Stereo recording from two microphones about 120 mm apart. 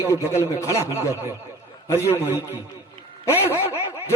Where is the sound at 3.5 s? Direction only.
15° right (ahead or behind).